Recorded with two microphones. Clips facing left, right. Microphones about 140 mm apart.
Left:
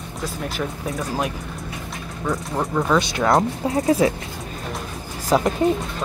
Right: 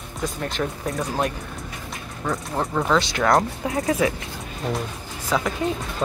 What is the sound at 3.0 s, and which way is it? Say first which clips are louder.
Speech: left 1 dB; 20° left (ahead or behind).